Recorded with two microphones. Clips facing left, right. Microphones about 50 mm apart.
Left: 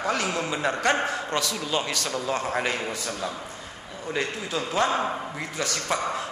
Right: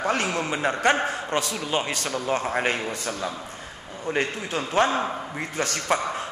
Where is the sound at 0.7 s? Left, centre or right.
Right.